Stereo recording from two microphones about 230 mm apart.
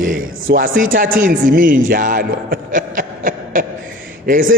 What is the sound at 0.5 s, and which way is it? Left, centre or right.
A man's voice, right.